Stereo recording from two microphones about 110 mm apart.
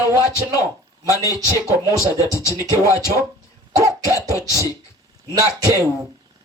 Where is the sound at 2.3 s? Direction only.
30° left (ahead or behind).